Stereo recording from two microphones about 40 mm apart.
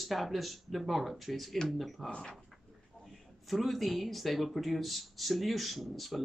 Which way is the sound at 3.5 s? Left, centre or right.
Centre.